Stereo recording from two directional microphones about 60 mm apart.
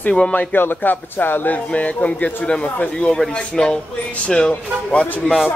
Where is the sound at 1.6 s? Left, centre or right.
Left.